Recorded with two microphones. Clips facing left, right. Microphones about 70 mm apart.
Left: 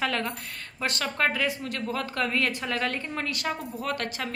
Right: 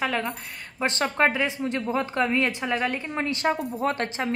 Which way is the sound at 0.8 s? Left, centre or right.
Right.